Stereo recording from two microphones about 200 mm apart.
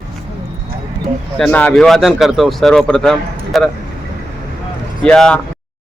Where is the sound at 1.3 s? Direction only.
5° left (ahead or behind).